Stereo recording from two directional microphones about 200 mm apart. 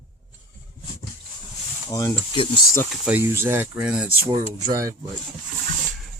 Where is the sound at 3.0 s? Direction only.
10° right (ahead or behind).